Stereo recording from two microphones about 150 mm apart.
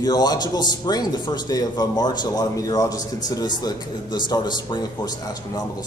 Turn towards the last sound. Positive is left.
turn(degrees=30)  # may be behind; listen again after turning